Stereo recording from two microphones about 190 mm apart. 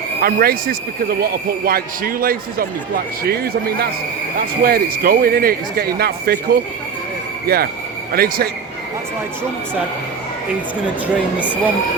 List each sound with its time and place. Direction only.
0.2 s a man's voice: 50° right (ahead or behind)
7.4 s a man's voice: 55° right (ahead or behind)
11.3 s speech: 10° left (ahead or behind)